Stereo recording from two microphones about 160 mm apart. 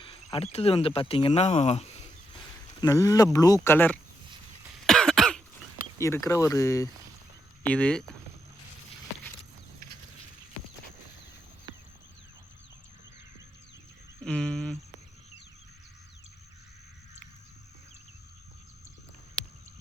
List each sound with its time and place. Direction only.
0.0 s speech: 35° left (ahead or behind)
2.8 s speech: 20° left (ahead or behind)
4.9 s cough: 5° left (ahead or behind)
6.0 s speech: 20° left (ahead or behind)
7.6 s speech: 10° left (ahead or behind)
14.3 s a sound: 5° left (ahead or behind)